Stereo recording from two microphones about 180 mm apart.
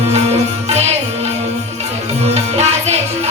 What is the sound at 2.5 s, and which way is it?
Music, 35° right (ahead or behind).